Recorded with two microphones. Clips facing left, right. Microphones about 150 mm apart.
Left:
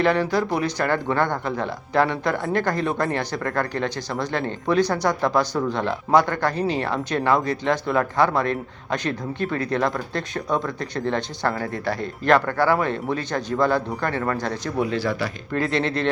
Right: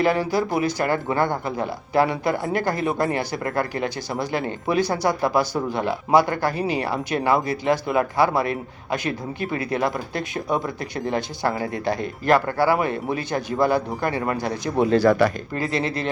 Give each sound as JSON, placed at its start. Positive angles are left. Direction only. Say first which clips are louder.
{"t": 0.0, "sound": "speech", "louder": "even", "side_deg": -5}
{"t": 14.8, "sound": "speech", "louder": "right 8 dB", "side_deg": -40}
{"t": 15.5, "sound": "speech", "louder": "left 2 dB", "side_deg": -5}